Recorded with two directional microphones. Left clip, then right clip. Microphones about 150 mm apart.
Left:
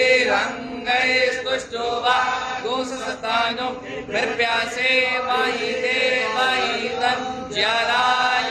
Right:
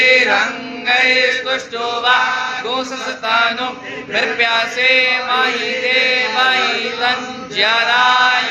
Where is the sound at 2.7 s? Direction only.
20° right (ahead or behind).